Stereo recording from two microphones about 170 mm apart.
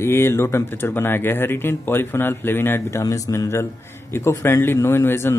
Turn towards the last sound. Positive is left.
turn(degrees=15)  # may be behind; listen again after turning